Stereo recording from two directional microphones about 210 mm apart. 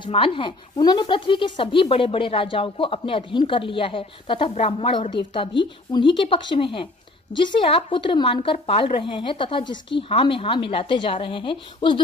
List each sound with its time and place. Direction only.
0.0 s speech: 25° left (ahead or behind)